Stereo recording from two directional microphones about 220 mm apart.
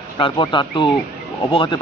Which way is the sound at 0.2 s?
20° left (ahead or behind).